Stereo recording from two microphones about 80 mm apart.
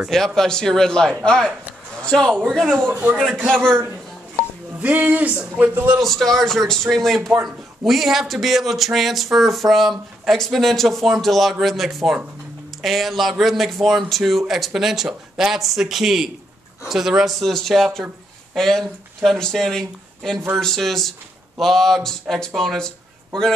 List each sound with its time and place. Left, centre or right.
0.1 s a man's voice: centre
4.7 s speech: centre
5.9 s speech: centre